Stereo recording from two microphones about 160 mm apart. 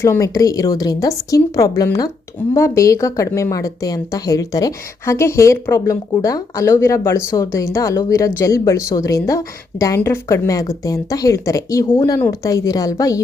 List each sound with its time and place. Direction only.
0.0 s speech: 20° left (ahead or behind)